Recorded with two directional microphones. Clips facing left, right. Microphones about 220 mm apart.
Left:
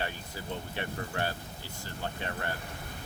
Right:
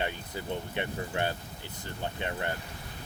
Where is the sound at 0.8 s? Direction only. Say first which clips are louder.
Right 2 dB; 20° right (ahead or behind).